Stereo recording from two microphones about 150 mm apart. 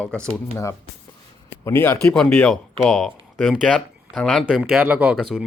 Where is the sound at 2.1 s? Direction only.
5° left (ahead or behind).